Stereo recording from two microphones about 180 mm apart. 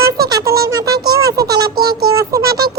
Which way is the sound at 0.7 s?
20° right (ahead or behind).